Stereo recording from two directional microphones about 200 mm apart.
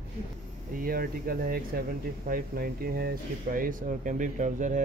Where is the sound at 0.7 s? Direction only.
45° right (ahead or behind).